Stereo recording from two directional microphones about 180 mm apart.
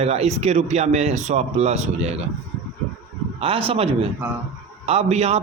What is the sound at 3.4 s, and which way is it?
Speech, 30° right (ahead or behind).